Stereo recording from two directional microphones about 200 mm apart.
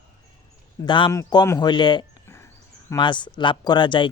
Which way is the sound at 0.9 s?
25° left (ahead or behind).